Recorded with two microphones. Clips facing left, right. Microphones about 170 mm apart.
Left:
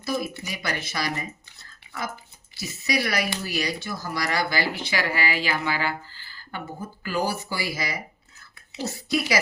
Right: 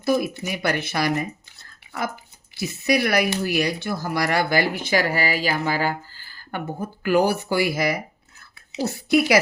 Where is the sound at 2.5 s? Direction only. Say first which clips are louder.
Right 6 dB; 55° right (ahead or behind).